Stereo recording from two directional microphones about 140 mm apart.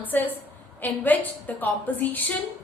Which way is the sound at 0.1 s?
15° left (ahead or behind).